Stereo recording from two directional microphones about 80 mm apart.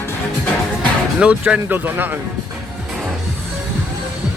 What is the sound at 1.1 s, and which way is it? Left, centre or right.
Speech, centre.